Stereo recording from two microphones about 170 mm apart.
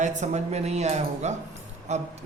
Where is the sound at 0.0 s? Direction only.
45° right (ahead or behind).